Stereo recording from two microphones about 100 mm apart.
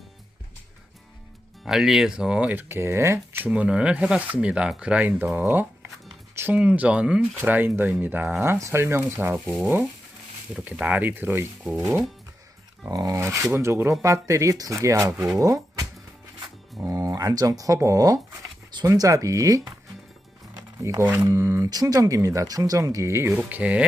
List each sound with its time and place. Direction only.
1.6 s speech: 5° right (ahead or behind)
6.3 s a sound: 20° right (ahead or behind)
6.6 s speech: 15° right (ahead or behind)
10.5 s speech: 15° right (ahead or behind)
12.9 s speech: 40° right (ahead or behind)
15.4 s a sound: 35° right (ahead or behind)
16.7 s speech: 35° right (ahead or behind)
20.6 s music: 35° right (ahead or behind)
21.0 s speech: 20° right (ahead or behind)
21.7 s speech: 40° right (ahead or behind)
23.3 s speech: 15° right (ahead or behind)